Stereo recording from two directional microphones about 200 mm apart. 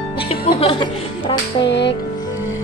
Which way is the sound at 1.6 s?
60° left (ahead or behind).